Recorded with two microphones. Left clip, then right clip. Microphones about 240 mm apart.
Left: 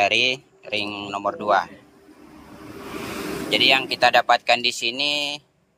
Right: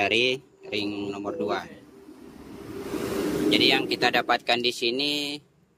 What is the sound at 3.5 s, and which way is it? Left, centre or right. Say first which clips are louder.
Speech: left 5 dB; centre.